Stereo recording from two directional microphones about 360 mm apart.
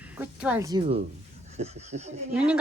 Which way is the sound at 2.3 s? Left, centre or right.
Centre.